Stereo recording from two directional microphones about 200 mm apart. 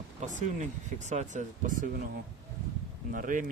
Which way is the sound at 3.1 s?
40° right (ahead or behind).